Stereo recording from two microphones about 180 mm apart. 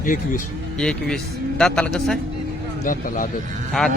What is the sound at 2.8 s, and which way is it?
Speech, 50° left (ahead or behind).